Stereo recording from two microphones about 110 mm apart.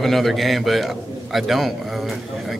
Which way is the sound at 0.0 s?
Centre (ahead or behind).